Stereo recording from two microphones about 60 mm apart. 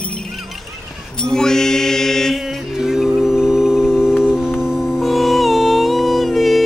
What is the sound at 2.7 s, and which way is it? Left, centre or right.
Music, centre.